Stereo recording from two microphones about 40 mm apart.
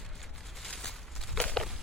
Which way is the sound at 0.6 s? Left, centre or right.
Centre.